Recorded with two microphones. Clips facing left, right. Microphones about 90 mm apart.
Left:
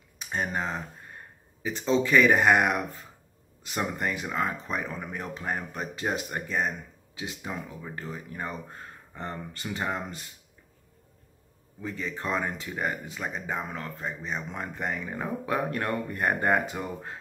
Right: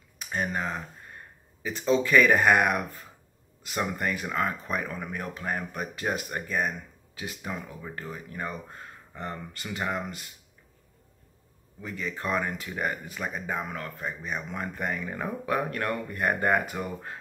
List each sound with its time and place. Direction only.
0.2 s speech: 30° left (ahead or behind)
11.8 s speech: 30° left (ahead or behind)